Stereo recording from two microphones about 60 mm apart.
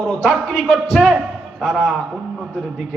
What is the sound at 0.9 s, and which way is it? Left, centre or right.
A man's voice, centre.